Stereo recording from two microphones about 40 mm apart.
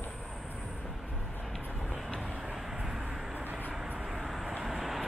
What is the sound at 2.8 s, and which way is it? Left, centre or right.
Vehicle, centre.